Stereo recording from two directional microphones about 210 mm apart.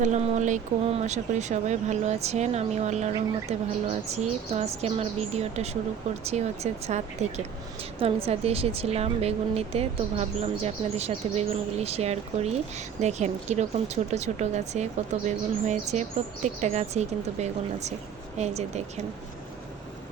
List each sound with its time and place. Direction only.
0.0 s a woman's voice: 35° right (ahead or behind)